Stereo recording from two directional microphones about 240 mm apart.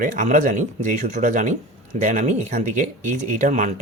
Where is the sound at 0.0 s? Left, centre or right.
Right.